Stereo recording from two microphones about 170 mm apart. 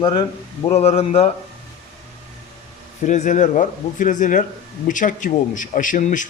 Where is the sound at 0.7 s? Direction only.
40° left (ahead or behind).